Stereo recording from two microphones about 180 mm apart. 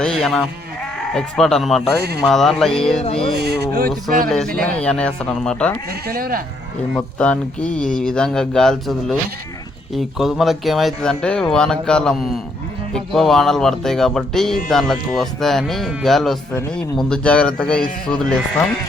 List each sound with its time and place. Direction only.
0.0 s speech: centre (ahead or behind)
2.0 s speech: 65° right (ahead or behind)
2.2 s speech: centre (ahead or behind)
3.3 s a sound: 65° right (ahead or behind)
4.3 s speech: 5° left (ahead or behind)
6.1 s speech: 55° right (ahead or behind)
6.9 s speech: 5° left (ahead or behind)